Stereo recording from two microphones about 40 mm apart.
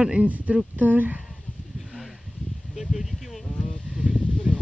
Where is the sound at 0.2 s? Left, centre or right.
Right.